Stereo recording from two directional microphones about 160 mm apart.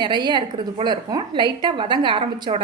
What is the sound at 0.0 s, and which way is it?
A woman's voice, 30° right (ahead or behind).